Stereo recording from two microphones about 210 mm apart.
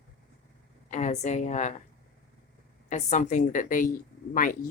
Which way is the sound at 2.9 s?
35° left (ahead or behind).